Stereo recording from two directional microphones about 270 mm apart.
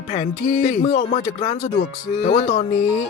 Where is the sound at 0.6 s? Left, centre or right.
Left.